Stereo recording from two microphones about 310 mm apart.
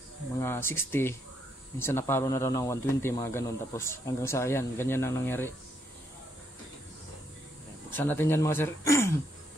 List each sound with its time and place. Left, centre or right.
0.4 s speech: centre
7.9 s speech: centre